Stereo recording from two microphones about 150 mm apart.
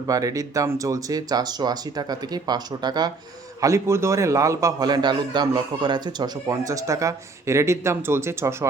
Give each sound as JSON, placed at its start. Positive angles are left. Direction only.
{"t": 0.1, "sound": "a man's voice", "side_deg": -25}